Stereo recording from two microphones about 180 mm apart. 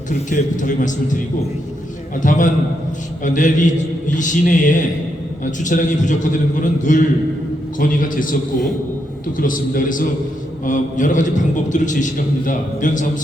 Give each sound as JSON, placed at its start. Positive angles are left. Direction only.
{"t": 0.1, "sound": "a man's voice", "side_deg": 45}
{"t": 2.2, "sound": "a man's voice", "side_deg": 45}